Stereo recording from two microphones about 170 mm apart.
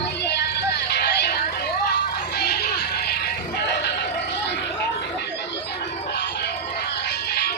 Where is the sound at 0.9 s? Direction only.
70° left (ahead or behind).